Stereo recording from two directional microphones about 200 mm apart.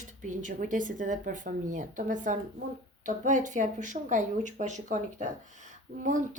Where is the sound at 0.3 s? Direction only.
40° right (ahead or behind).